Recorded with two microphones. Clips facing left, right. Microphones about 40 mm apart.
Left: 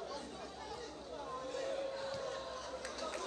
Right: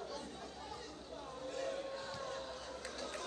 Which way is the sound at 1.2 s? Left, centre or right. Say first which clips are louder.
Left 2 dB; left.